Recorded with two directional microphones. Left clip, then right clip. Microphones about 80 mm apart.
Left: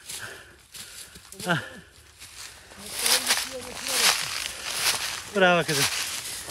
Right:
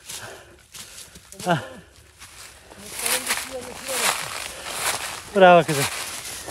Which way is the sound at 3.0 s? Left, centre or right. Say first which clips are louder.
Left 1 dB; centre.